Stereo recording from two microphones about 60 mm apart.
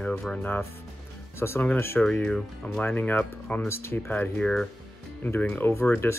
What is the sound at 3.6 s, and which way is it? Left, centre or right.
Speech, left.